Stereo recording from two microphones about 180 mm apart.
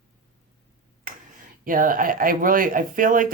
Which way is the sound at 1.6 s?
50° right (ahead or behind).